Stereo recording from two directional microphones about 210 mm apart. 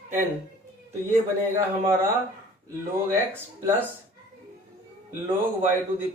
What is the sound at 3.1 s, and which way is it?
Speech, 10° right (ahead or behind).